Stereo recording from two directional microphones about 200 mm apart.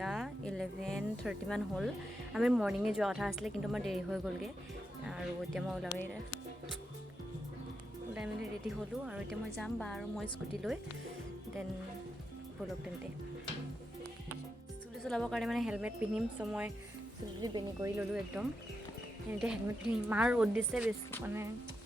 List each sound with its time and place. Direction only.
0.0 s speech: centre (ahead or behind)
8.7 s speech: 5° right (ahead or behind)
15.0 s speech: 5° left (ahead or behind)
17.4 s speech: 20° right (ahead or behind)
19.3 s speech: 5° right (ahead or behind)